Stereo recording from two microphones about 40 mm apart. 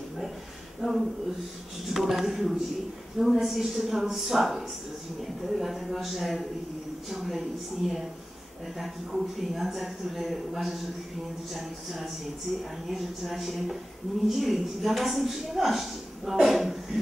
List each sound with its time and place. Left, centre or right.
0.7 s a woman's voice: centre